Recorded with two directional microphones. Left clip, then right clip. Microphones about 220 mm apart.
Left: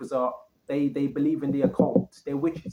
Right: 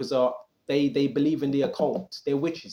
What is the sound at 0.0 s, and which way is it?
Speech, 40° right (ahead or behind).